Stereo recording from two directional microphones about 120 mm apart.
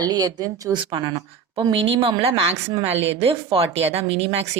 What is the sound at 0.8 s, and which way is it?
Speech, 40° right (ahead or behind).